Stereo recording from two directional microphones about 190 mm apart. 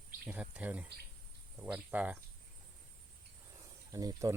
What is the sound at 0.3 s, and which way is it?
Speech, 5° right (ahead or behind).